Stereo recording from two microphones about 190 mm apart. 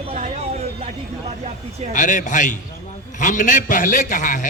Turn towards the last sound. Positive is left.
turn(degrees=45)  # may be behind; listen again after turning